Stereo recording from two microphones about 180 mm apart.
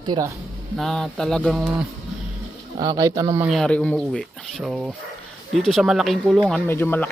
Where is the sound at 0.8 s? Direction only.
Centre (ahead or behind).